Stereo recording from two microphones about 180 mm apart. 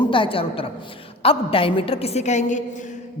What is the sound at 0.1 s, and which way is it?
A woman's voice, 30° left (ahead or behind).